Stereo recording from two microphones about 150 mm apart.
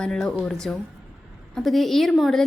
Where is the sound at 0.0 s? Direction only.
5° left (ahead or behind).